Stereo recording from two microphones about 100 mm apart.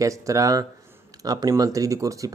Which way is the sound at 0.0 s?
30° right (ahead or behind).